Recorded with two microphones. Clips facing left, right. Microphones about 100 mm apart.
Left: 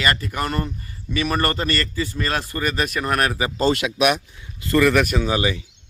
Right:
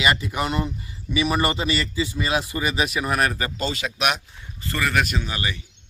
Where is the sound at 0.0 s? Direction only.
10° right (ahead or behind).